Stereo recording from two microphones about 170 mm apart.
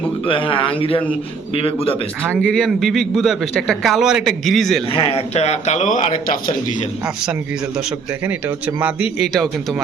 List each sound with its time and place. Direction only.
0.3 s speech: 30° left (ahead or behind)
2.5 s a man's voice: centre (ahead or behind)
4.9 s speech: 35° left (ahead or behind)
8.3 s speech: 10° right (ahead or behind)